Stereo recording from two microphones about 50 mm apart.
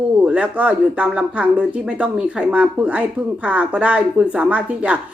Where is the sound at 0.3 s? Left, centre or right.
Right.